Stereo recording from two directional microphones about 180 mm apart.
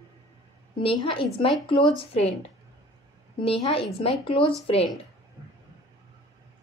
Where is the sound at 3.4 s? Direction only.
30° left (ahead or behind).